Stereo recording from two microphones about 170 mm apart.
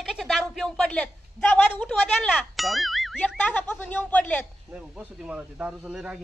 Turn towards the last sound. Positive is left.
turn(degrees=-5)  # may be behind; listen again after turning